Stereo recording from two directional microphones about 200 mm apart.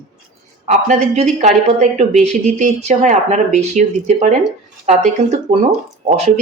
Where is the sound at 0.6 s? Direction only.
35° right (ahead or behind).